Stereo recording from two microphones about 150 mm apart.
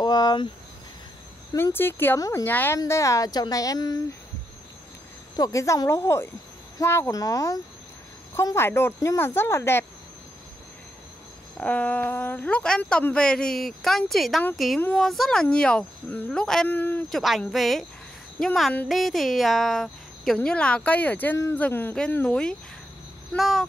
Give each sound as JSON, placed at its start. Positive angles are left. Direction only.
{"t": 0.0, "sound": "a sound", "side_deg": 25}
{"t": 1.5, "sound": "speech", "side_deg": 15}
{"t": 5.3, "sound": "speech", "side_deg": 20}
{"t": 11.5, "sound": "speech", "side_deg": 10}
{"t": 17.2, "sound": "speech", "side_deg": 0}